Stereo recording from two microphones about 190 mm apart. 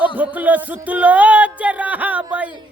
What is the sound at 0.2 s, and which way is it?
Music, 10° right (ahead or behind).